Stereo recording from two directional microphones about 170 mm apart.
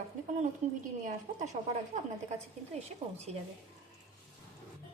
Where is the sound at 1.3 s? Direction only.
55° right (ahead or behind).